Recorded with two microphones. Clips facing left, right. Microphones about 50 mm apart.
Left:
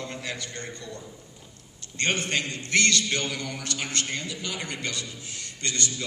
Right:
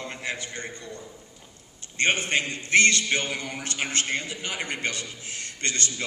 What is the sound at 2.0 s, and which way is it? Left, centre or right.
A man's voice, right.